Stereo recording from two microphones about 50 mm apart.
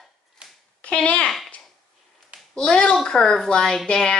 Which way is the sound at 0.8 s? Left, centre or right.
Left.